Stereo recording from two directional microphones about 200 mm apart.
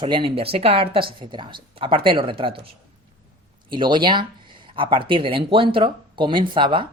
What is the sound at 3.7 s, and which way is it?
Speech, 25° right (ahead or behind).